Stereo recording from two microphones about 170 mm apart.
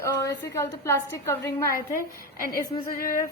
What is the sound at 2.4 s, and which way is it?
Speech, 55° left (ahead or behind).